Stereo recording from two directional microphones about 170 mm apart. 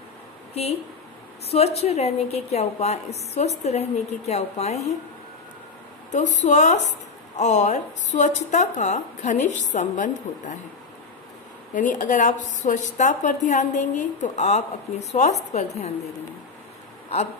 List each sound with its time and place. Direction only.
1.5 s a woman's voice: 35° left (ahead or behind)
6.1 s a woman's voice: 45° left (ahead or behind)
12.0 s a woman's voice: 45° left (ahead or behind)